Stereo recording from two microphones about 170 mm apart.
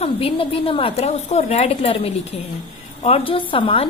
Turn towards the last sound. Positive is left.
turn(degrees=30)  # may be behind; listen again after turning